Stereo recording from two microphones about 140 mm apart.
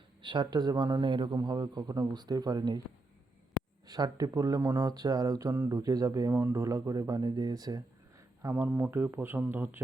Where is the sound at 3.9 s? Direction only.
30° right (ahead or behind).